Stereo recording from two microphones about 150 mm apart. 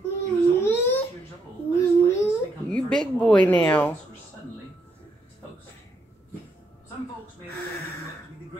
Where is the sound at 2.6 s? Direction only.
5° left (ahead or behind).